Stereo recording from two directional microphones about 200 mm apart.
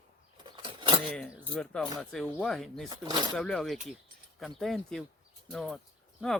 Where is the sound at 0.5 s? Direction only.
25° right (ahead or behind).